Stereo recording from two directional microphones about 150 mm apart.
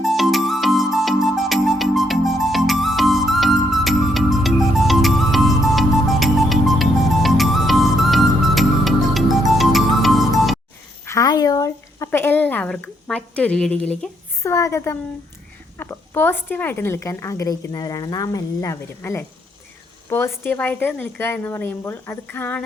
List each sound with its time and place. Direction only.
0.0 s music: centre (ahead or behind)
11.0 s a sound: 20° left (ahead or behind)
14.4 s a woman's voice: 20° left (ahead or behind)